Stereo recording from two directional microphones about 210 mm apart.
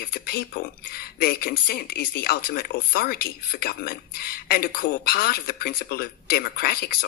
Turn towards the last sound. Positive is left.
turn(degrees=45)  # may be behind; listen again after turning